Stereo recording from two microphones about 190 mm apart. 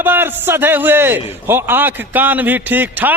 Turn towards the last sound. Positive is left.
turn(degrees=-10)  # may be behind; listen again after turning